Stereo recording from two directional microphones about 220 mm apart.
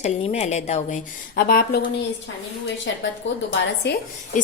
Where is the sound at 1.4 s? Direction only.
45° left (ahead or behind).